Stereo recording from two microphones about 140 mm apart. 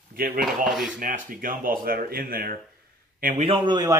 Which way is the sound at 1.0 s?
80° right.